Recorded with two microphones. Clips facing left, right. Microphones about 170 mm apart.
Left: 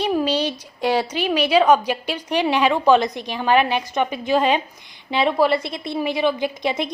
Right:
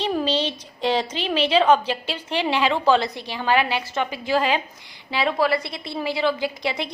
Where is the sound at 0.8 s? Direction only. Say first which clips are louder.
Left 2 dB; 10° left (ahead or behind).